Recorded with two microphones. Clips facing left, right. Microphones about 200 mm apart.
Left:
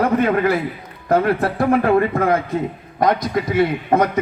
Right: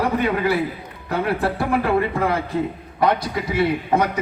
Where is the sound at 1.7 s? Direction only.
50° left (ahead or behind).